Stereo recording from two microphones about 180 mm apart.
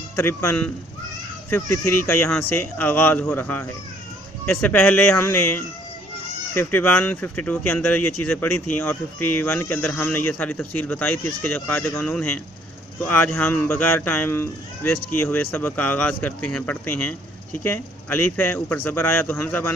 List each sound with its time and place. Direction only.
0.2 s speech: 15° left (ahead or behind)